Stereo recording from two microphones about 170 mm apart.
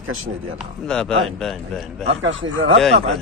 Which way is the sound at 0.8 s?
5° left (ahead or behind).